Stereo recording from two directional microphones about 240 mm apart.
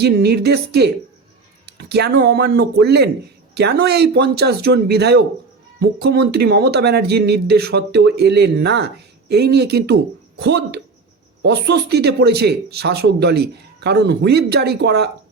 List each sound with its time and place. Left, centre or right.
0.0 s speech: right